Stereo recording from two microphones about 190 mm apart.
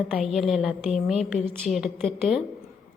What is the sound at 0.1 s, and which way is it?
A woman's voice, centre (ahead or behind).